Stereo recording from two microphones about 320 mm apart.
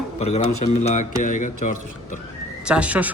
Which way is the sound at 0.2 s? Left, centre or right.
Centre.